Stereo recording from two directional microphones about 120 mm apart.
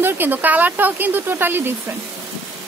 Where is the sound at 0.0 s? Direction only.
15° right (ahead or behind).